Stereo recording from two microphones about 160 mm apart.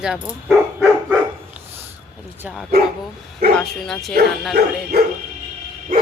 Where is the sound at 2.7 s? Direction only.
70° right (ahead or behind).